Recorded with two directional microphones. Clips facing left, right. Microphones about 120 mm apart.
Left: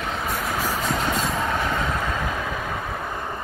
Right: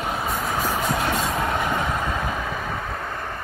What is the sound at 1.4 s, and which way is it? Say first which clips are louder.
Train: right 1 dB; 15° right (ahead or behind).